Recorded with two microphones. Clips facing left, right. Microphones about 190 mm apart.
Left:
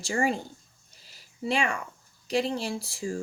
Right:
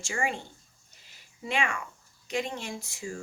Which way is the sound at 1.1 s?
35° left (ahead or behind).